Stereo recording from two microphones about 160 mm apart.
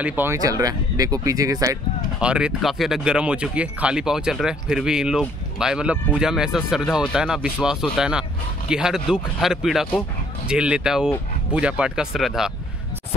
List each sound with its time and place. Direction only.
0.0 s speech: 10° right (ahead or behind)
2.1 s speech: 5° right (ahead or behind)